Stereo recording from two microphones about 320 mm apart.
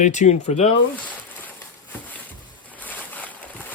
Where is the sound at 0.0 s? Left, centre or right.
Left.